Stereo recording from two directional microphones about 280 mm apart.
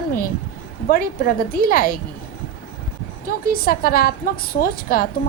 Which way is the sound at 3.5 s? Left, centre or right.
Left.